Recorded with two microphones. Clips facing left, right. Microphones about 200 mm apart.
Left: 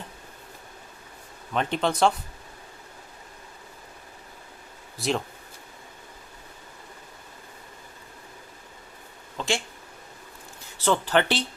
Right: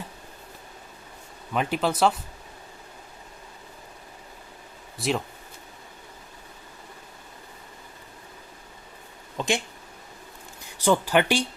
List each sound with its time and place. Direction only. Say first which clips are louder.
1.5 s speech: even; 5° right (ahead or behind)
4.9 s speech: even; centre (ahead or behind)
9.4 s speech: right 2 dB; 15° right (ahead or behind)
10.8 s speech: right 2 dB; 10° right (ahead or behind)